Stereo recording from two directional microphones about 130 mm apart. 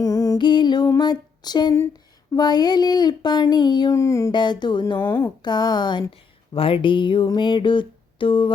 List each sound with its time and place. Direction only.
0.0 s music: 25° left (ahead or behind)
0.9 s speech: 35° left (ahead or behind)
4.3 s speech: 35° left (ahead or behind)